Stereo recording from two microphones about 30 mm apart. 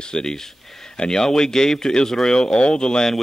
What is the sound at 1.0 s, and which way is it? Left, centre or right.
Speech, left.